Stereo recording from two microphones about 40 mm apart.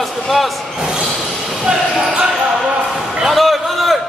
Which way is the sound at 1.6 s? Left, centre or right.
Centre.